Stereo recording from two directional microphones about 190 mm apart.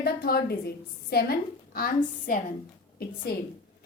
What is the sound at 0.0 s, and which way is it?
A woman's voice, 55° left (ahead or behind).